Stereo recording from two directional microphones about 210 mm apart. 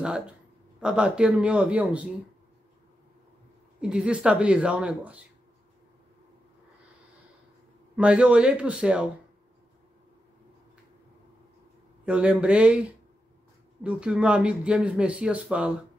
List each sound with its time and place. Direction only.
0.7 s speech: 5° right (ahead or behind)
3.8 s speech: 5° right (ahead or behind)
7.9 s speech: 5° right (ahead or behind)
12.1 s speech: 5° right (ahead or behind)
13.8 s speech: 5° right (ahead or behind)